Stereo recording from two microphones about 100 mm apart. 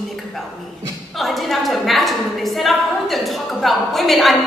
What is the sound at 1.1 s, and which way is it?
A woman's voice, centre (ahead or behind).